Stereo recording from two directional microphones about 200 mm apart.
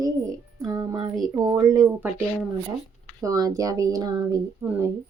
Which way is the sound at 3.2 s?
15° right (ahead or behind).